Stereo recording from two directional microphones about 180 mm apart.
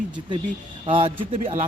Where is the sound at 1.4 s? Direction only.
45° right (ahead or behind).